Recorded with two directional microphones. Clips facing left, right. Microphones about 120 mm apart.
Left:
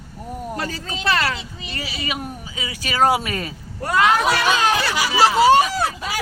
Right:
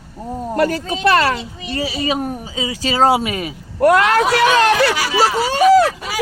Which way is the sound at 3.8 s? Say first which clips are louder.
Right 5 dB; 70° right (ahead or behind).